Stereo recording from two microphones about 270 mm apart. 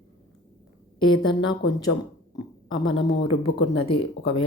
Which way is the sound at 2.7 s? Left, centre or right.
Left.